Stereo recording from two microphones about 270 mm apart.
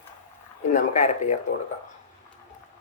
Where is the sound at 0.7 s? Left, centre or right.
Left.